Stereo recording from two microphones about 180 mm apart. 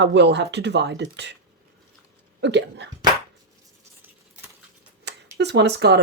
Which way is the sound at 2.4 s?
75° right (ahead or behind).